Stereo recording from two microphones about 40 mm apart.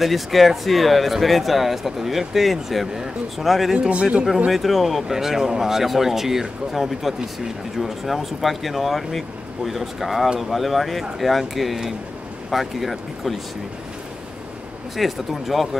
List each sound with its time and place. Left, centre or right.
0.0 s speech: centre
3.9 s speech: right
4.5 s speech: centre
15.0 s speech: centre